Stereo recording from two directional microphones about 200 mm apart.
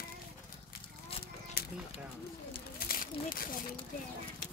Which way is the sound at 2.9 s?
45° left (ahead or behind).